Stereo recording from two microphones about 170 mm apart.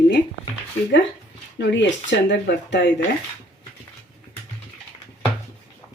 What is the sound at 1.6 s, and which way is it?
Speech, 90° left.